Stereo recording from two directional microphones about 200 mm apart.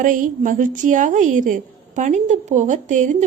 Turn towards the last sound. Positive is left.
turn(degrees=-40)  # may be behind; listen again after turning